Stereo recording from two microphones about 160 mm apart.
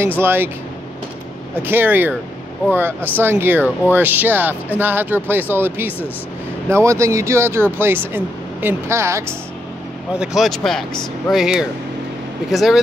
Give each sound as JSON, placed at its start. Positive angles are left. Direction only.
{"t": 0.2, "sound": "speech", "side_deg": -15}
{"t": 1.5, "sound": "speech", "side_deg": -15}
{"t": 10.1, "sound": "speech", "side_deg": -5}